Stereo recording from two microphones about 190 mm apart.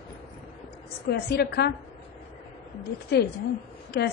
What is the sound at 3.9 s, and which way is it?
Speech, 55° left (ahead or behind).